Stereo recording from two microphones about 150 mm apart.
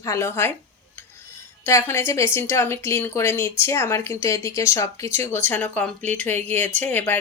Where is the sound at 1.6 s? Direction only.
15° left (ahead or behind).